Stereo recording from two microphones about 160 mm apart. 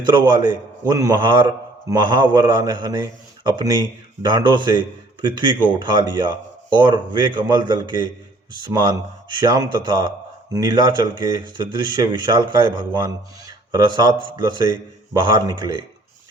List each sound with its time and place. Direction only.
0.0 s a man's voice: 30° right (ahead or behind)